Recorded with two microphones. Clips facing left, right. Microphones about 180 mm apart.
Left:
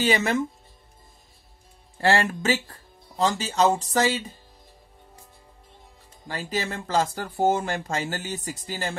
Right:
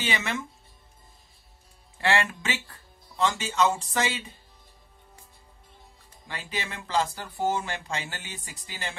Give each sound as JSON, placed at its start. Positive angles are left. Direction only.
{"t": 0.0, "sound": "speech", "side_deg": 40}
{"t": 2.0, "sound": "speech", "side_deg": 40}
{"t": 6.2, "sound": "speech", "side_deg": 40}